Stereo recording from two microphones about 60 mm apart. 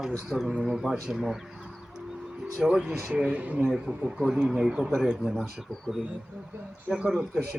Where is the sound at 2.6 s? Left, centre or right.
Centre.